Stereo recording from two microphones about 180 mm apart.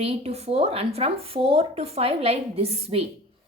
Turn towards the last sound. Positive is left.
turn(degrees=-35)  # may be behind; listen again after turning